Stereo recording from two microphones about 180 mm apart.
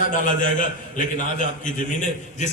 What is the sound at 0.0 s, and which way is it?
Speech, 45° left (ahead or behind).